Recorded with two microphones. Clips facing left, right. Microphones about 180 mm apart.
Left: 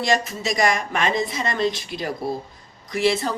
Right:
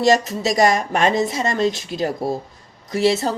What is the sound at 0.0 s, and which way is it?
Speech, 40° right (ahead or behind).